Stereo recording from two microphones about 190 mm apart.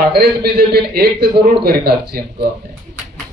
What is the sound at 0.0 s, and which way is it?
A man's voice, 55° right (ahead or behind).